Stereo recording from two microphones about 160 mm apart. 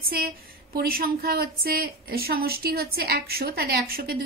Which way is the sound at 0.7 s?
70° right (ahead or behind).